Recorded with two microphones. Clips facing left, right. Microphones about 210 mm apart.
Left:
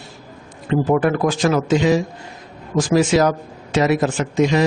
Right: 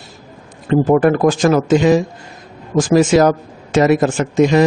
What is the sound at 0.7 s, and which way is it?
Speech, 45° right (ahead or behind).